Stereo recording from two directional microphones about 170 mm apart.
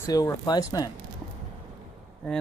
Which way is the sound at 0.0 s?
20° left (ahead or behind).